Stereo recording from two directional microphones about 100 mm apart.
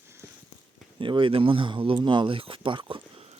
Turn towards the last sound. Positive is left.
turn(degrees=-60)  # may be behind; listen again after turning